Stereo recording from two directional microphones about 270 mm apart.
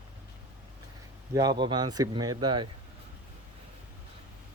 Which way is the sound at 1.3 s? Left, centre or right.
Centre.